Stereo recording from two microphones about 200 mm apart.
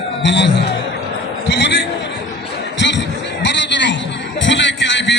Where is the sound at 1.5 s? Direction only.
60° left (ahead or behind).